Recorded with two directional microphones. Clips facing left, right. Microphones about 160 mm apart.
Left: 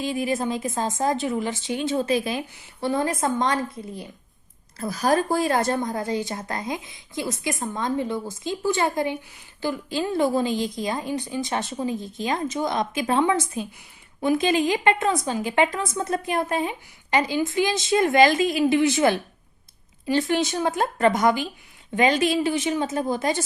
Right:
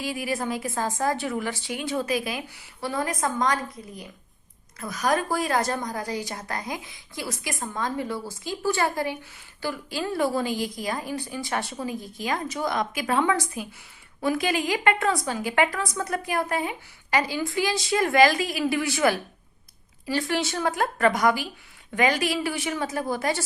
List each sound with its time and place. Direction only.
0.0 s a woman's voice: 25° left (ahead or behind)